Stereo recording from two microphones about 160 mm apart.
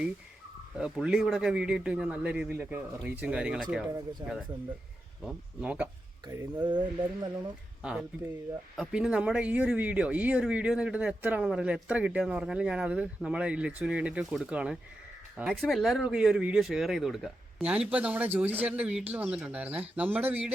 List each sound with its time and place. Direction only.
0.8 s a man's voice: 5° right (ahead or behind)
4.2 s speech: 25° right (ahead or behind)
5.2 s speech: 5° right (ahead or behind)
6.2 s speech: 25° right (ahead or behind)
7.8 s speech: 5° right (ahead or behind)